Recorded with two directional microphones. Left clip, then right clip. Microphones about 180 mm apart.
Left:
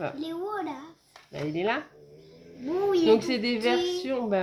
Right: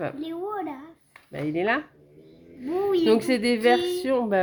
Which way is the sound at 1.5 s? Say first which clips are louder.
Right 4 dB; 60° right (ahead or behind).